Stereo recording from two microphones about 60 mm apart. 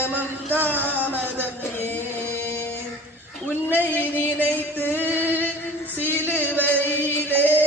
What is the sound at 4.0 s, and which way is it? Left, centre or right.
Music, left.